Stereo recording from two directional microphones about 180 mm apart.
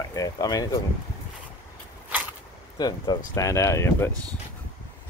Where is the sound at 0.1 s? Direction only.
20° left (ahead or behind).